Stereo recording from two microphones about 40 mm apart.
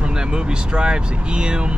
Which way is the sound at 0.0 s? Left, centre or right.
Right.